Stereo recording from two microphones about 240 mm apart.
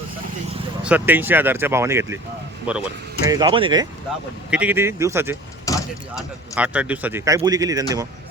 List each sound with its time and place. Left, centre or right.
0.8 s speech: centre
3.2 s speech: centre
4.5 s speech: centre
5.7 s door: centre
6.1 s speech: centre